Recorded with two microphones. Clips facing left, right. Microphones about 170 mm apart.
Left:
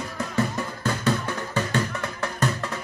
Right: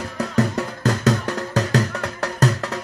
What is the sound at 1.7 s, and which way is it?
Music, 80° right.